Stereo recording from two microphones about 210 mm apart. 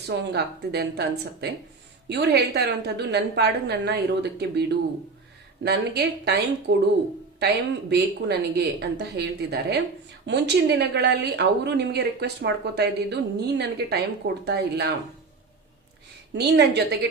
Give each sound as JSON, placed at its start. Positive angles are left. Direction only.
{"t": 0.1, "sound": "speech", "side_deg": -55}
{"t": 5.6, "sound": "speech", "side_deg": -50}
{"t": 16.3, "sound": "speech", "side_deg": -55}